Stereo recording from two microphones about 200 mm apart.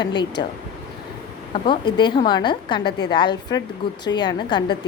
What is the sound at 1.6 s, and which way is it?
A woman's voice, 25° left (ahead or behind).